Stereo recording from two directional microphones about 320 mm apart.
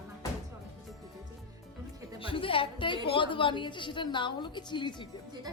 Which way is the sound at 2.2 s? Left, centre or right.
Centre.